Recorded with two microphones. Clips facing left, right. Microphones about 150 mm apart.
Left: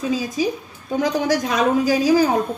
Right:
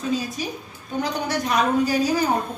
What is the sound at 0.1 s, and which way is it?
A woman's voice, 90° left.